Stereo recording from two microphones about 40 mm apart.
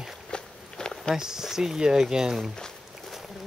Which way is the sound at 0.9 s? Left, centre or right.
Centre.